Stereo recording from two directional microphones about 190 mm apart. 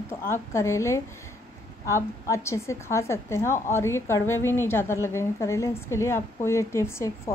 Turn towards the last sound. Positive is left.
turn(degrees=15)  # may be behind; listen again after turning